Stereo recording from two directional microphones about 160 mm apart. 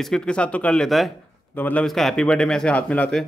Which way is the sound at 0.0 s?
5° left (ahead or behind).